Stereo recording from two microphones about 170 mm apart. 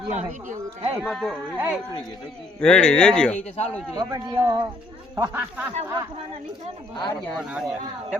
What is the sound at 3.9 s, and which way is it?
Speech, 25° right (ahead or behind).